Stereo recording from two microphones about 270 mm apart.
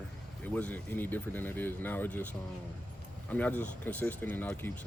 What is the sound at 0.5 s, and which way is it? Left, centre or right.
Speech, centre.